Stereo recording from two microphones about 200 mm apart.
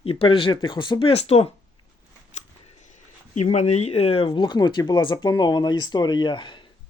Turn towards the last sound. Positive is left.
turn(degrees=25)  # may be behind; listen again after turning